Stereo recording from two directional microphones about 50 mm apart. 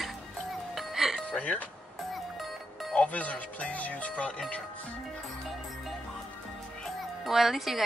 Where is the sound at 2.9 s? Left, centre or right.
Left.